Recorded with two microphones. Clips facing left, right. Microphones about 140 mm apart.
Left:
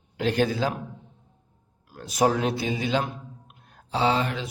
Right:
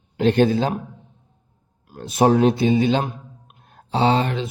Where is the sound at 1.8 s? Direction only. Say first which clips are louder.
Right 4 dB; 25° right (ahead or behind).